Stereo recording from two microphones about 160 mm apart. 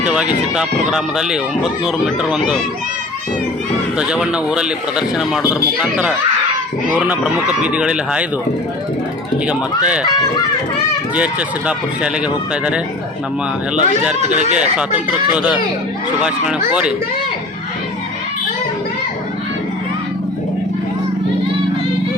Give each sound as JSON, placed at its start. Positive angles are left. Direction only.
{"t": 0.1, "sound": "speech", "side_deg": -5}
{"t": 3.9, "sound": "speech", "side_deg": -5}
{"t": 9.5, "sound": "speech", "side_deg": -5}
{"t": 11.1, "sound": "speech", "side_deg": -10}
{"t": 13.7, "sound": "speech", "side_deg": -5}
{"t": 14.2, "sound": "speech", "side_deg": -45}
{"t": 14.5, "sound": "speech", "side_deg": -5}